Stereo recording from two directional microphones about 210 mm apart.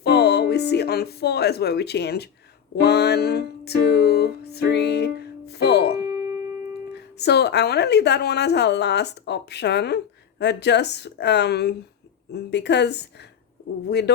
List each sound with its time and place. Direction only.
0.0 s music: 50° left (ahead or behind)
2.8 s speech: 50° left (ahead or behind)
6.0 s music: 15° right (ahead or behind)
6.9 s speech: 50° left (ahead or behind)